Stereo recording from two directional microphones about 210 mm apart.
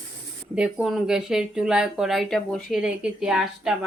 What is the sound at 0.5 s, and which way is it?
Speech, 5° right (ahead or behind).